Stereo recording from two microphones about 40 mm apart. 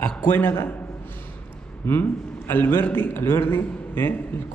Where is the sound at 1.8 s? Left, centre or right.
Left.